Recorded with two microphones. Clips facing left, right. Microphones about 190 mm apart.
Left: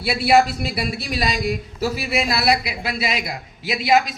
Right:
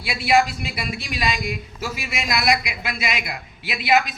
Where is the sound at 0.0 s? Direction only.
40° left (ahead or behind).